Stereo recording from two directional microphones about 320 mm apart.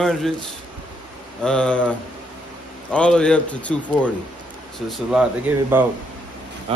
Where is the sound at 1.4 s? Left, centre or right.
Centre.